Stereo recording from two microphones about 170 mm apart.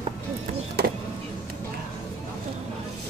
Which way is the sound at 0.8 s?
70° right (ahead or behind).